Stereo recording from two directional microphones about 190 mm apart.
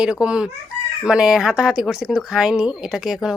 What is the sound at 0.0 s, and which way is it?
Speech, 5° right (ahead or behind).